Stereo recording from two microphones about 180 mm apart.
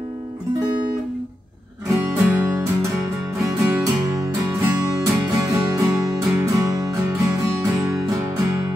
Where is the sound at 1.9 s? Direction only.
10° right (ahead or behind).